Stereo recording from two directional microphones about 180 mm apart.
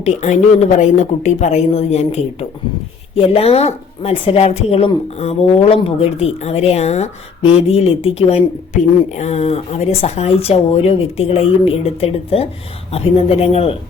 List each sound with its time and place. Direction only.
0.0 s speech: 40° left (ahead or behind)